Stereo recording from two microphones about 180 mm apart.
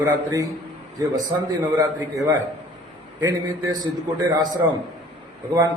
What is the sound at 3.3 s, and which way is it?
Speech, 20° right (ahead or behind).